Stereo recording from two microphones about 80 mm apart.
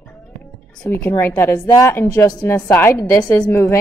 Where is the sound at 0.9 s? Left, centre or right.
Left.